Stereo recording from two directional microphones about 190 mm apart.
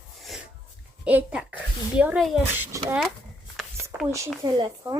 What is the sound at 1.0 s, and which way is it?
Speech, 5° right (ahead or behind).